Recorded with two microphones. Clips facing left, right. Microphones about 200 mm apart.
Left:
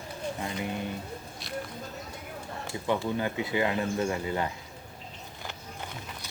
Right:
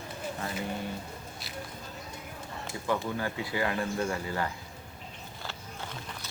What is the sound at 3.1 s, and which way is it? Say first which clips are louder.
Speech: left 3 dB; 20° left (ahead or behind).